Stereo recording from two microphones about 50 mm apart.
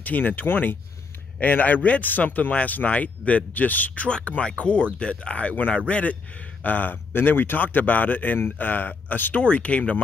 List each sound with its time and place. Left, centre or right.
0.0 s speech: left
9.3 s speech: left